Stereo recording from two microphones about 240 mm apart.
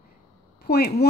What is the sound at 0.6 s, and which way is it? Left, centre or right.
Speech, left.